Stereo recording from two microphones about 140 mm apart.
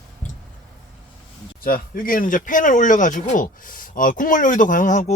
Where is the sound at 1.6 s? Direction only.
90° left.